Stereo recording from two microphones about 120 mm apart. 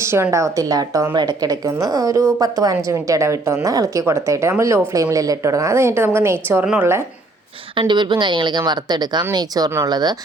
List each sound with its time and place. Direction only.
0.0 s a woman's voice: 25° right (ahead or behind)
7.8 s a woman's voice: 40° right (ahead or behind)